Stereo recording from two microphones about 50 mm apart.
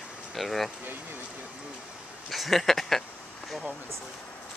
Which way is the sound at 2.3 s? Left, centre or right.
Centre.